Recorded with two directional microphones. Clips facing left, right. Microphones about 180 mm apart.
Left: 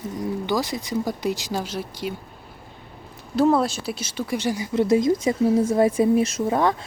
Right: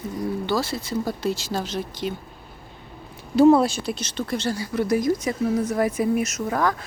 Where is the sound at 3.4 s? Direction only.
Centre (ahead or behind).